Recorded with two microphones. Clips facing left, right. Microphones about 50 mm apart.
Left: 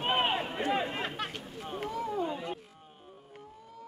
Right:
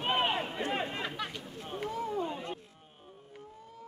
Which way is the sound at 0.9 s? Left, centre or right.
Left.